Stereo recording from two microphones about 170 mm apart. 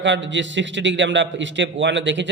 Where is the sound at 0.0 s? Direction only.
90° right.